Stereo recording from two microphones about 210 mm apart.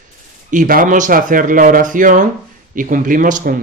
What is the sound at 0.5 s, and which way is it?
Speech, 40° right (ahead or behind).